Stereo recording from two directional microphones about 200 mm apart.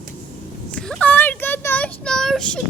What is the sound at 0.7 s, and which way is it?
Child singing, 5° left (ahead or behind).